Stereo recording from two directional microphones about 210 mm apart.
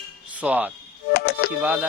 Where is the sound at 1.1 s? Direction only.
50° left (ahead or behind).